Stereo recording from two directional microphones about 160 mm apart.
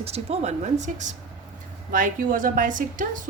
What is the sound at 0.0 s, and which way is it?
A woman's voice, 40° right (ahead or behind).